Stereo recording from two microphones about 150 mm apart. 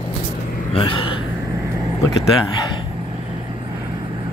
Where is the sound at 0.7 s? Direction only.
35° left (ahead or behind).